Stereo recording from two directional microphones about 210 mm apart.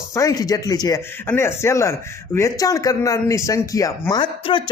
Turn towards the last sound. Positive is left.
turn(degrees=25)  # may be behind; listen again after turning